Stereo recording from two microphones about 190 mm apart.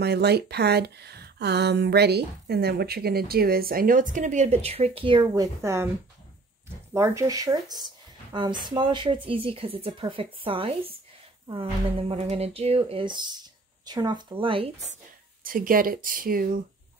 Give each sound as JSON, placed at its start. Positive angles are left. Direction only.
{"t": 0.0, "sound": "speech", "side_deg": -60}
{"t": 6.9, "sound": "a woman's voice", "side_deg": -15}
{"t": 15.4, "sound": "speech", "side_deg": -50}